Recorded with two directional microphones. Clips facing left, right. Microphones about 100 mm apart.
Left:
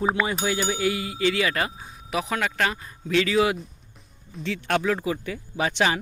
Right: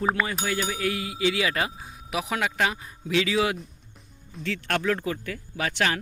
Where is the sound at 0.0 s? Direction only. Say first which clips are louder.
Left 2 dB; 5° left (ahead or behind).